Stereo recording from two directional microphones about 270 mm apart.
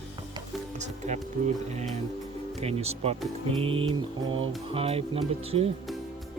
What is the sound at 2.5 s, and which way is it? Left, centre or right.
Speech, right.